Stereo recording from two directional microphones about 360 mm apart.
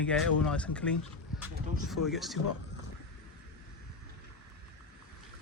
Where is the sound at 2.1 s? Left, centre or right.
Centre.